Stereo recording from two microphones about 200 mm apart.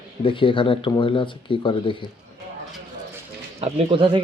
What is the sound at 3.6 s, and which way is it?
Speech, 25° right (ahead or behind).